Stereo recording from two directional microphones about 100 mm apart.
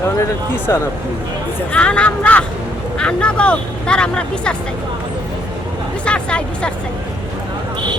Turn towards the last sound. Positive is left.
turn(degrees=10)  # may be behind; listen again after turning